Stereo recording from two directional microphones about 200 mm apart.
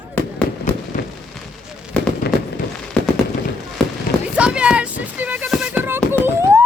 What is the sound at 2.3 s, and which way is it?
Fireworks, 55° left (ahead or behind).